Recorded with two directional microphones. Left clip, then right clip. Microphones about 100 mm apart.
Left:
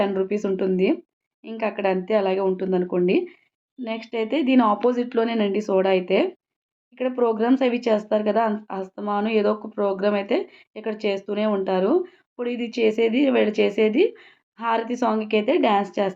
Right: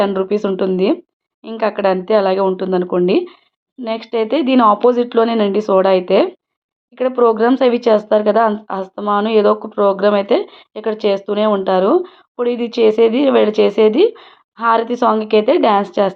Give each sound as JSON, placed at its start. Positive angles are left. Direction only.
{"t": 0.0, "sound": "speech", "side_deg": -40}